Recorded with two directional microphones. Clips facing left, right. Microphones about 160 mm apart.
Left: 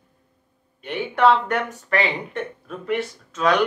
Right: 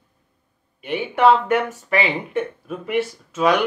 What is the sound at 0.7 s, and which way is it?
Speech, 5° right (ahead or behind).